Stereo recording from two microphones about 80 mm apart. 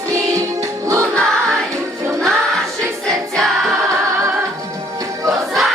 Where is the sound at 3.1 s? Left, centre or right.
Centre.